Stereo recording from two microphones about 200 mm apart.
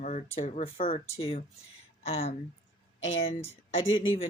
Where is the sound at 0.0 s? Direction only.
35° left (ahead or behind).